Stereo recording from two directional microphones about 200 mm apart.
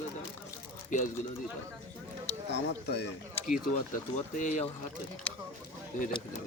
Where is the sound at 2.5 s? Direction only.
55° left (ahead or behind).